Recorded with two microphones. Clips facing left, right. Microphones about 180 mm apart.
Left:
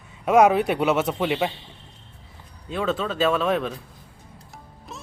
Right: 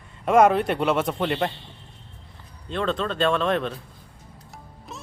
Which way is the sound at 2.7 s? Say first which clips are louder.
Even; 5° left (ahead or behind).